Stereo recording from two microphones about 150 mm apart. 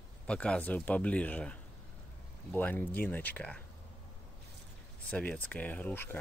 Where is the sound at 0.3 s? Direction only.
5° left (ahead or behind).